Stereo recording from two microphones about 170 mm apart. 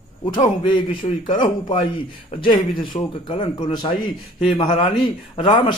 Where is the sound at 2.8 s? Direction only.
30° left (ahead or behind).